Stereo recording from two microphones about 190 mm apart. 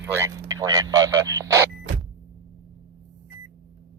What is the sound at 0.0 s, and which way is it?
A man's voice, 10° right (ahead or behind).